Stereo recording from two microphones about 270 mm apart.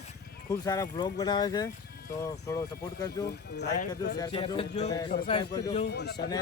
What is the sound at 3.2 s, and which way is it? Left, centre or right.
Speech, left.